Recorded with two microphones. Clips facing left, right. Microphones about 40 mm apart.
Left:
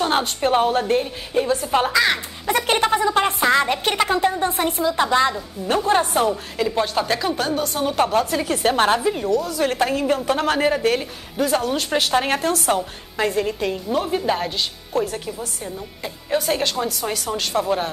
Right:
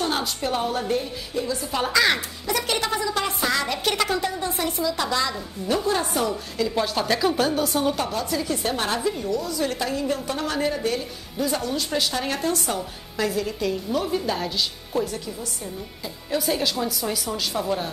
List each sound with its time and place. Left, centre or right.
0.0 s a woman's voice: left
1.9 s speech: centre
2.4 s a woman's voice: left
6.7 s speech: centre
8.0 s a woman's voice: left
8.9 s a woman's voice: left
9.5 s a woman's voice: left
13.2 s a woman's voice: left
17.4 s a woman's voice: left